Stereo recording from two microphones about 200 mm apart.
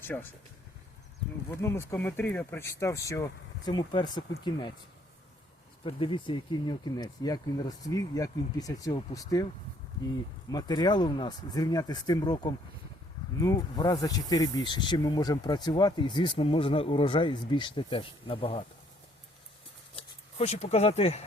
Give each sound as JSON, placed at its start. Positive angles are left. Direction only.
{"t": 0.0, "sound": "speech", "side_deg": 10}
{"t": 1.5, "sound": "speech", "side_deg": 15}
{"t": 5.8, "sound": "speech", "side_deg": 25}
{"t": 10.5, "sound": "speech", "side_deg": 20}
{"t": 20.0, "sound": "speech", "side_deg": 30}